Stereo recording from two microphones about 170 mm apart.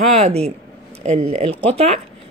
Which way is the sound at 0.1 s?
40° right (ahead or behind).